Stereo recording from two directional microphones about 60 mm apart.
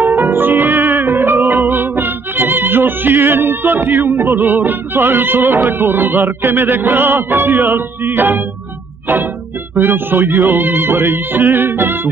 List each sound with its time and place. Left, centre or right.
0.0 s music: centre
0.3 s music: right
1.4 s music: centre
1.7 s music: right